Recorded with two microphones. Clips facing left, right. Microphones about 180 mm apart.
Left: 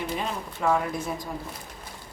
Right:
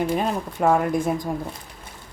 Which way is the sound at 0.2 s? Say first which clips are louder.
Right 7 dB; 50° right (ahead or behind).